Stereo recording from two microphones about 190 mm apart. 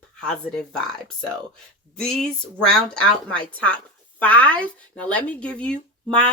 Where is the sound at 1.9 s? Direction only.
5° left (ahead or behind).